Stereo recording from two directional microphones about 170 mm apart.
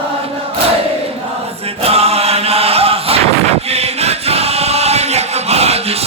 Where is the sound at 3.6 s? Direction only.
40° right (ahead or behind).